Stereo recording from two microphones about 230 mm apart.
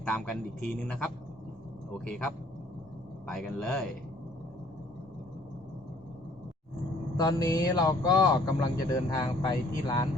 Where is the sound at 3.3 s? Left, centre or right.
Centre.